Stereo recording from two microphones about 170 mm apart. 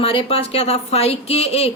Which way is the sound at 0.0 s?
30° left (ahead or behind).